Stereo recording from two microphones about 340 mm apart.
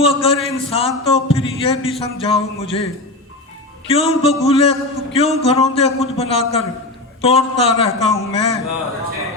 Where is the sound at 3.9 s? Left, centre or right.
Centre.